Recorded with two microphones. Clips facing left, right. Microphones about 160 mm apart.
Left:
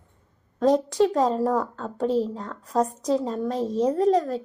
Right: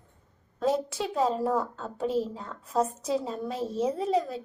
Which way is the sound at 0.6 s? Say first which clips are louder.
Left 8 dB; 5° right (ahead or behind).